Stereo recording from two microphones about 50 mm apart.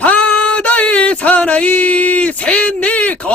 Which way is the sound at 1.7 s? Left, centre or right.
Left.